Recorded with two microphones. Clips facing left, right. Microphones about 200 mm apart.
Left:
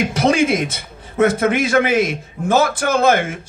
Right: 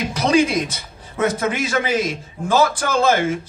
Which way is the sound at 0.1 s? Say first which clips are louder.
Right 3 dB; 25° left (ahead or behind).